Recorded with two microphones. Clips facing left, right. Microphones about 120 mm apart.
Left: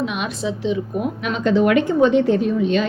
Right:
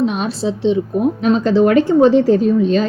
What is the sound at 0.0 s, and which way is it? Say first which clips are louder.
A woman's voice: right 6 dB; 35° right (ahead or behind).